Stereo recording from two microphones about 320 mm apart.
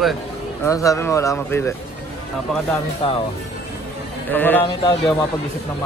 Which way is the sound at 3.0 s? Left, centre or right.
Centre.